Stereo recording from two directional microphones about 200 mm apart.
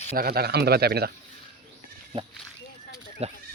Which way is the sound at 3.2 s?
30° right (ahead or behind).